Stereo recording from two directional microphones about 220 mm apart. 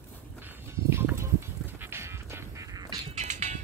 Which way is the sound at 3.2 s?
30° right (ahead or behind).